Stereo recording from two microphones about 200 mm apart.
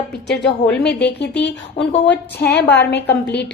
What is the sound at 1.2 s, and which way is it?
A woman's voice, 60° left (ahead or behind).